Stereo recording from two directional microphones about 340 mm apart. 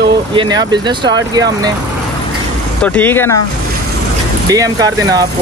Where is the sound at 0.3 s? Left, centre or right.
Centre.